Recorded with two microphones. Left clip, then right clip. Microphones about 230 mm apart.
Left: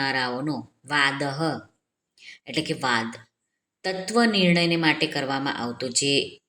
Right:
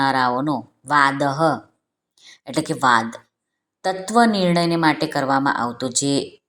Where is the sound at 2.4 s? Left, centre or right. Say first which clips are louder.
Right 4 dB; right.